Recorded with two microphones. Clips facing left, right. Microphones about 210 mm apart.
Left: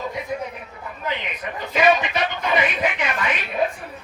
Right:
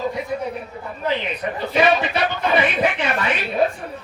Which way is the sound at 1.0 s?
30° right (ahead or behind).